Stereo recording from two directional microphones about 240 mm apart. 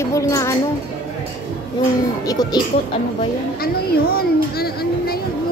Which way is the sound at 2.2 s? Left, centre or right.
Centre.